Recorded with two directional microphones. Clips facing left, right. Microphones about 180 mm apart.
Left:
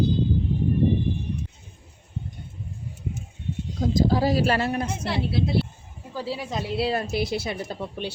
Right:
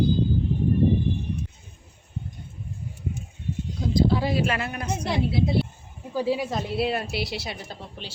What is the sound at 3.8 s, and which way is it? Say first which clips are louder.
Speech: left 1 dB; 40° left (ahead or behind).